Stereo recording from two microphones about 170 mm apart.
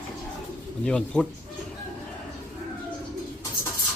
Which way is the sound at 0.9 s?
5° left (ahead or behind).